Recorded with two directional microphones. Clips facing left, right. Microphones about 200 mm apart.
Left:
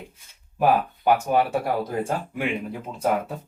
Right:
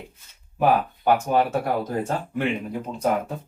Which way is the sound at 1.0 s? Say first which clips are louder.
Even; 10° left (ahead or behind).